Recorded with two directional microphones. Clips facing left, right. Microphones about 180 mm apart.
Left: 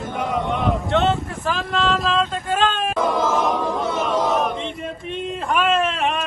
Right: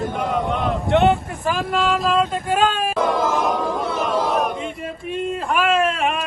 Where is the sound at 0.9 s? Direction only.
15° right (ahead or behind).